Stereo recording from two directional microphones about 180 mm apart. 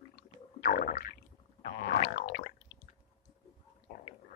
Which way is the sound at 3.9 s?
60° left (ahead or behind).